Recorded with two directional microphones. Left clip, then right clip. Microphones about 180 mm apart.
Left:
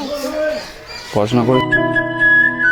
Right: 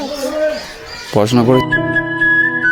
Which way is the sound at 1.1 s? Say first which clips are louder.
Right 3 dB; 35° right (ahead or behind).